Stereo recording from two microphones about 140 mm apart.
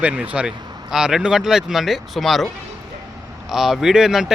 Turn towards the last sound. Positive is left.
turn(degrees=-5)  # may be behind; listen again after turning